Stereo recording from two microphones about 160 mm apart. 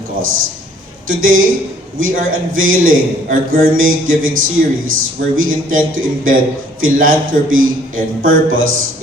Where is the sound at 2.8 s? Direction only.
60° right (ahead or behind).